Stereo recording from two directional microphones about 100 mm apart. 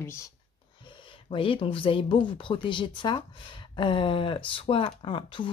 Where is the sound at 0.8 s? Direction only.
55° left (ahead or behind).